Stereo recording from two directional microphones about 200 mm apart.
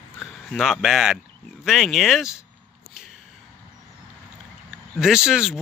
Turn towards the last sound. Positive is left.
turn(degrees=0)  # may be behind; listen again after turning